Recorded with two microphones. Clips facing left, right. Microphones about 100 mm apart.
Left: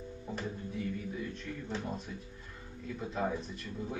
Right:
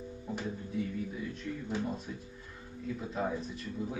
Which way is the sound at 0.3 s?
Centre (ahead or behind).